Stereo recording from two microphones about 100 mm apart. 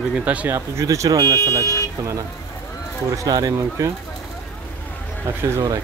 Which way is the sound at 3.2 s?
40° right (ahead or behind).